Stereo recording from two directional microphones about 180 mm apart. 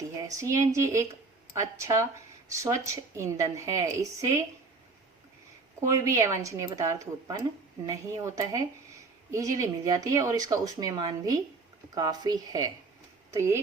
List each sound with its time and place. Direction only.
0.3 s a woman's voice: 15° right (ahead or behind)
6.1 s a woman's voice: 15° right (ahead or behind)